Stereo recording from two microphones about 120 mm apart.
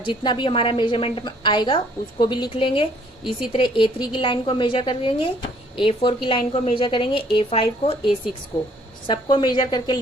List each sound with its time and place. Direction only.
0.0 s a woman's voice: 45° left (ahead or behind)
9.0 s a woman's voice: 40° left (ahead or behind)